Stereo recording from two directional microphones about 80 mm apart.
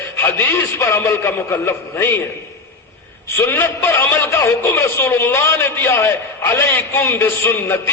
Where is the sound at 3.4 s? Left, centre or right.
Left.